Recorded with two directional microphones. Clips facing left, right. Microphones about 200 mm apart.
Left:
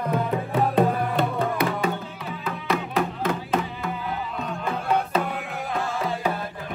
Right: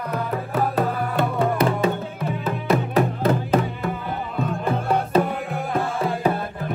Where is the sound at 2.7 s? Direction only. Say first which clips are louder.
Right 5 dB; 40° right (ahead or behind).